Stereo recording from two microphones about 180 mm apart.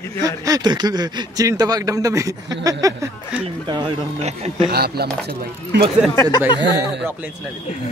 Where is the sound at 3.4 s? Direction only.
30° right (ahead or behind).